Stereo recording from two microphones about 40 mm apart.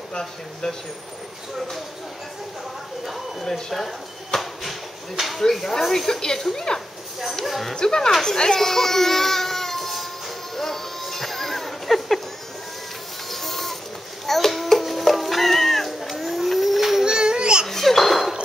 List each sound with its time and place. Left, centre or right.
0.1 s speech: centre
3.4 s a sound: centre
5.4 s speech: centre
7.3 s speech: centre
7.7 s speech: centre
8.1 s baby cry: centre
13.3 s printer: centre
14.2 s cat: centre
17.0 s baby cry: centre
17.6 s a sound: centre